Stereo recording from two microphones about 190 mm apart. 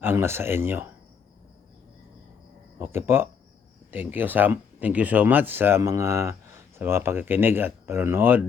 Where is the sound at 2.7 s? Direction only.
10° right (ahead or behind).